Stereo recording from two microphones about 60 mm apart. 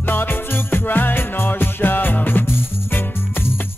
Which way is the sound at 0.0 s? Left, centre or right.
Left.